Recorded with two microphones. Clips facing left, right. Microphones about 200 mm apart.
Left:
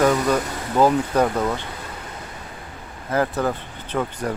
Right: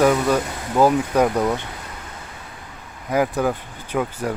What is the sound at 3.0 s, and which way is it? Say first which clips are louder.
Speech: right 2 dB; 10° right (ahead or behind).